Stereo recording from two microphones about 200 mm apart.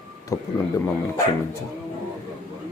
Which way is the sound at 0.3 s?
15° left (ahead or behind).